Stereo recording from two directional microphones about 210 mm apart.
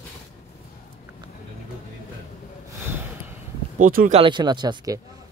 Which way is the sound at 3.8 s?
40° right (ahead or behind).